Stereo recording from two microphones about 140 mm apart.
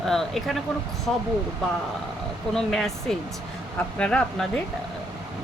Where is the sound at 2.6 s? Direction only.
Centre (ahead or behind).